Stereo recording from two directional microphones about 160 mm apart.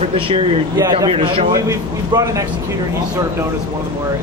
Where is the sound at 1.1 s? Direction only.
35° right (ahead or behind).